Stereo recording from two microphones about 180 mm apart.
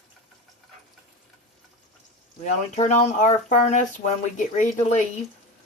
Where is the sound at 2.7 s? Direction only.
40° left (ahead or behind).